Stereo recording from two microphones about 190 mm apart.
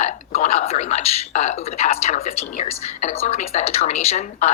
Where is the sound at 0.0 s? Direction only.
35° left (ahead or behind).